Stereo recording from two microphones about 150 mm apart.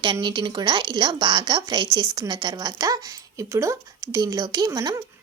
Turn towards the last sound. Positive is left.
turn(degrees=-25)  # may be behind; listen again after turning